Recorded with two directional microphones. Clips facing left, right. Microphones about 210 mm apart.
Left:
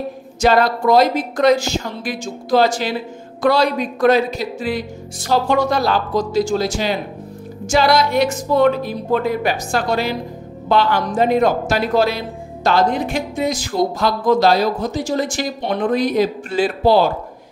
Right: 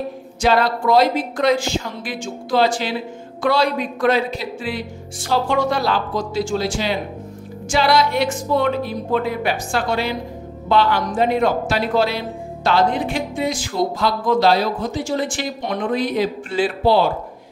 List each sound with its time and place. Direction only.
0.4 s speech: 45° left (ahead or behind)